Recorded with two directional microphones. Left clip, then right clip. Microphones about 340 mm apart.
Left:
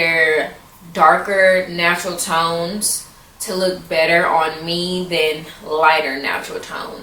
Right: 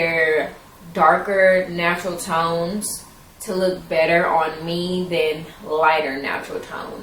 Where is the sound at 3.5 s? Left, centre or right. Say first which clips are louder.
Left 2 dB; centre.